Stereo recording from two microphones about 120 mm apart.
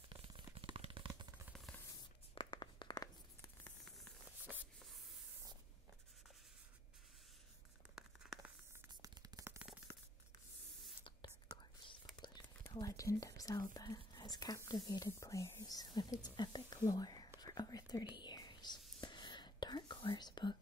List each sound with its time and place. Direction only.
0.1 s shuffling cards: 45° right (ahead or behind)
0.6 s a sound: 50° right (ahead or behind)
2.3 s writing: 40° left (ahead or behind)
3.6 s static: 5° left (ahead or behind)
7.9 s a sound: 5° right (ahead or behind)
9.0 s a sound: 30° right (ahead or behind)
11.5 s whispering: 45° left (ahead or behind)
12.7 s speech: 30° left (ahead or behind)
17.4 s whispering: 35° left (ahead or behind)